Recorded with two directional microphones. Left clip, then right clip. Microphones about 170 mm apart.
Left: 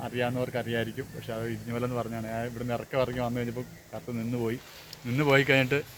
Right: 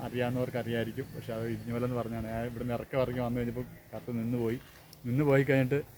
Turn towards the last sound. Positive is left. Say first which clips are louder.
# left 4 dB
turn(degrees=-15)  # may be behind; listen again after turning